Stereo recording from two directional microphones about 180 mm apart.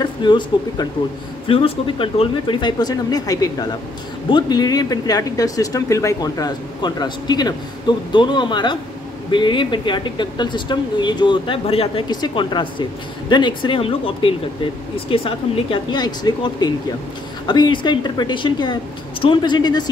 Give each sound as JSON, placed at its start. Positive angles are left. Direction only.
{"t": 0.0, "sound": "speech", "side_deg": 25}